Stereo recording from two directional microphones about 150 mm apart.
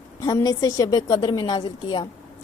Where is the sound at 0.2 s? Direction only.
25° left (ahead or behind).